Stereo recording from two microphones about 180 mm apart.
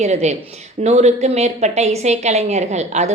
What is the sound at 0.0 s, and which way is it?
A woman's voice, 40° right (ahead or behind).